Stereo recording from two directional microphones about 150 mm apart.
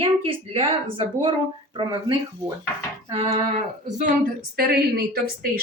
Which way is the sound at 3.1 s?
45° right (ahead or behind).